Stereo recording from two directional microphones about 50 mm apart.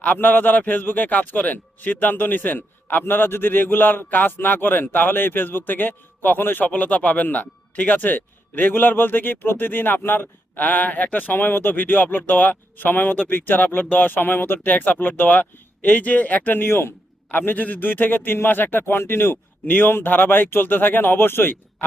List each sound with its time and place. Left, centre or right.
0.0 s a man's voice: left
14.7 s a man's voice: left
16.6 s speech: left
17.3 s a man's voice: left